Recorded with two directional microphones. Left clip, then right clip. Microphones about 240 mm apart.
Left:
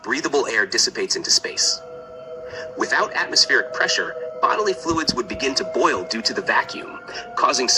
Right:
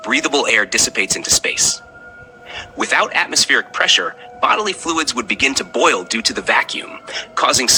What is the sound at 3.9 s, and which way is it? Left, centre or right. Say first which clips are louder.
Speech: right 5 dB; right.